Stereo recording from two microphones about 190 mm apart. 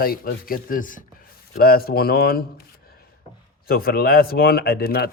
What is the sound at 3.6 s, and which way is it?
Speech, 50° left (ahead or behind).